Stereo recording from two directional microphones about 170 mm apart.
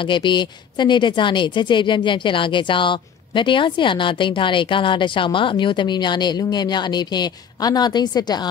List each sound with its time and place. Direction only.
0.0 s a woman's voice: 30° left (ahead or behind)